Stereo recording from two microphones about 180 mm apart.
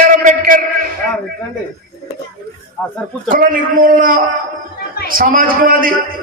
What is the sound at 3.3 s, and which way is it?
A man's voice, 50° right (ahead or behind).